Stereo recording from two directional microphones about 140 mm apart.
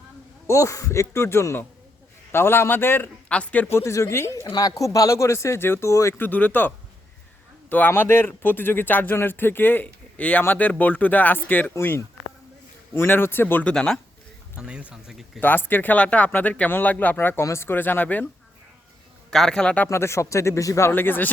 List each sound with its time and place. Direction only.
0.4 s speech: 20° left (ahead or behind); by 14.0 s 5° left (ahead or behind)
14.5 s speech: 10° right (ahead or behind)
15.4 s speech: 15° left (ahead or behind)
19.3 s speech: 5° left (ahead or behind)